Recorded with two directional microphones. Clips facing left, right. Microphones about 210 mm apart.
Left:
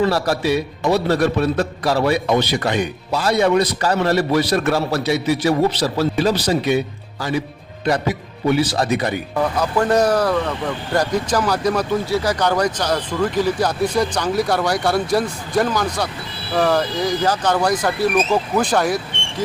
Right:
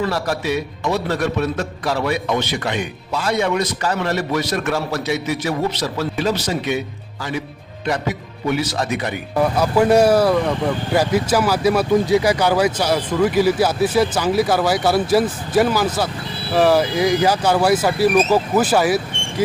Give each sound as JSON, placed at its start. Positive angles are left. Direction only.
{"t": 0.0, "sound": "a man's voice", "side_deg": 35}
{"t": 8.4, "sound": "a man's voice", "side_deg": 30}
{"t": 9.4, "sound": "speech", "side_deg": -10}